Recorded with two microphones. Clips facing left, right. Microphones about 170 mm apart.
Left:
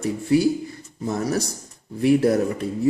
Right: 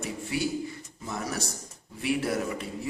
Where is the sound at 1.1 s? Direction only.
40° left (ahead or behind).